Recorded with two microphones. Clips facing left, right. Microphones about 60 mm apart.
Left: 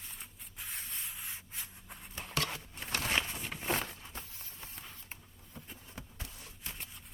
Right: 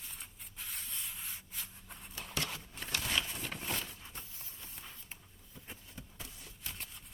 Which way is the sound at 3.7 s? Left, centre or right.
Left.